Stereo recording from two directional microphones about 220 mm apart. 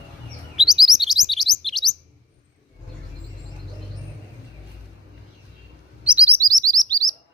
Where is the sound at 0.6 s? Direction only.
Centre (ahead or behind).